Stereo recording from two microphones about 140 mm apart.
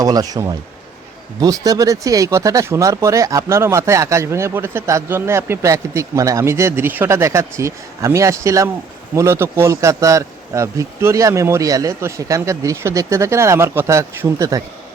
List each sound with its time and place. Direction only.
0.0 s speech: 25° right (ahead or behind)